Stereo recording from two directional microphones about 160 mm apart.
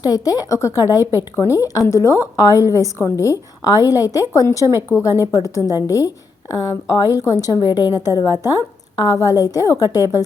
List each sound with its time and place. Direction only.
0.0 s a woman's voice: 25° left (ahead or behind)